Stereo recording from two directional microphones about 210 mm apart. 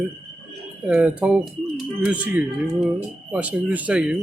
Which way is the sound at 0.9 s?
5° right (ahead or behind).